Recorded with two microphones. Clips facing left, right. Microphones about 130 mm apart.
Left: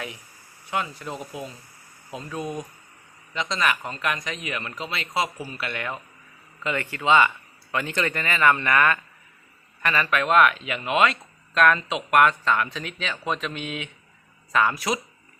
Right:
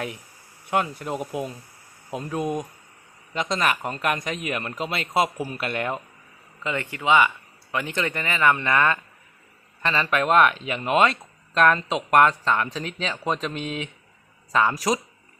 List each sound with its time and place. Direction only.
0.7 s speech: 50° right (ahead or behind)
3.5 s speech: 45° right (ahead or behind)
6.6 s speech: 20° right (ahead or behind)
14.8 s speech: 35° right (ahead or behind)